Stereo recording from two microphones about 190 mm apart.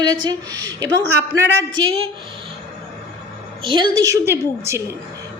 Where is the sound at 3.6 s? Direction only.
25° right (ahead or behind).